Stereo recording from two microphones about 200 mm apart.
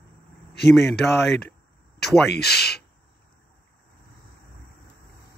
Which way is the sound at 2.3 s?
55° left (ahead or behind).